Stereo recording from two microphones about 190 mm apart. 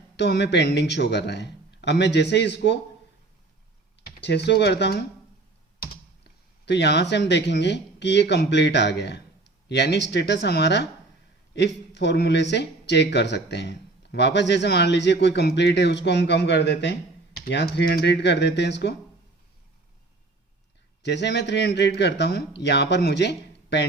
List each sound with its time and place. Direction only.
0.2 s speech: 60° left (ahead or behind)
4.0 s speech: 60° left (ahead or behind)
6.7 s speech: 65° left (ahead or behind)
21.0 s speech: 65° left (ahead or behind)